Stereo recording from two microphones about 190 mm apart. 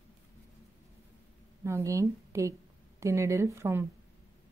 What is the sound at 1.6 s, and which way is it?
A woman's voice, 15° right (ahead or behind).